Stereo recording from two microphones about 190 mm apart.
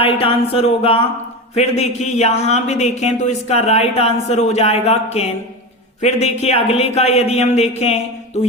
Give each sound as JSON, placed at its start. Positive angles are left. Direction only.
{"t": 0.0, "sound": "speech", "side_deg": 30}